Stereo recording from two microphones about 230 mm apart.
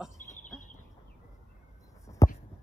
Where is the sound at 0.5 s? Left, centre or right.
Centre.